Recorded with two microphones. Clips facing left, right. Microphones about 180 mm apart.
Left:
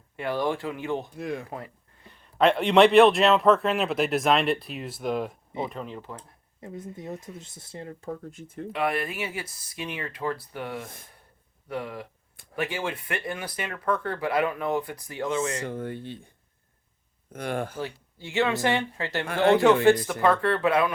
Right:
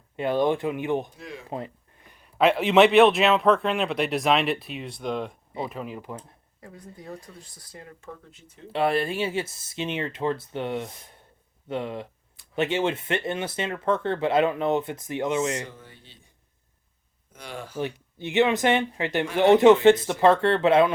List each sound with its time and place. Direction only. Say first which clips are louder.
0.2 s speech: right 4 dB; 20° right (ahead or behind)
1.1 s speech: left 8 dB; 55° left (ahead or behind)
1.5 s a sound: right 4 dB; 25° right (ahead or behind)
2.2 s a man's voice: even; 5° right (ahead or behind)
6.6 s speech: left 6 dB; 20° left (ahead or behind)
8.3 s speech: left 10 dB; 50° left (ahead or behind)
8.7 s speech: right 4 dB; 30° right (ahead or behind)
15.7 s speech: left 16 dB; 55° left (ahead or behind)
17.3 s speech: left 8 dB; 55° left (ahead or behind)
17.7 s speech: right 4 dB; 20° right (ahead or behind)